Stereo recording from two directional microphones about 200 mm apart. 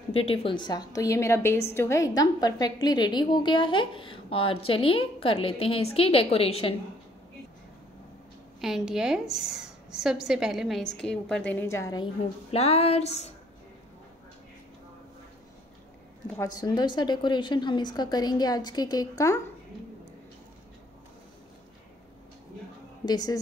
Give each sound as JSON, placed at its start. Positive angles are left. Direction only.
{"t": 0.1, "sound": "a woman's voice", "side_deg": 30}
{"t": 8.5, "sound": "a woman's voice", "side_deg": 0}
{"t": 12.4, "sound": "speech", "side_deg": 30}
{"t": 16.3, "sound": "a woman's voice", "side_deg": 20}
{"t": 23.0, "sound": "a woman's voice", "side_deg": 20}